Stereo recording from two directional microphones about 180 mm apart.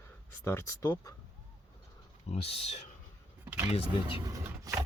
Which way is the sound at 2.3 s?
35° left (ahead or behind).